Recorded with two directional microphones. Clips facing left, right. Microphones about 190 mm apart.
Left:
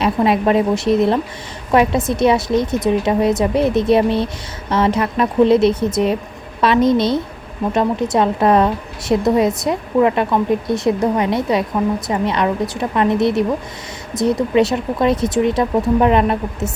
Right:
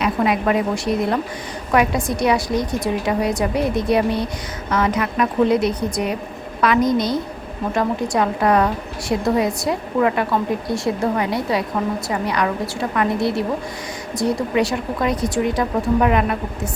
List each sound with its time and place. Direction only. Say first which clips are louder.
0.0 s speech: left 3 dB; 30° left (ahead or behind)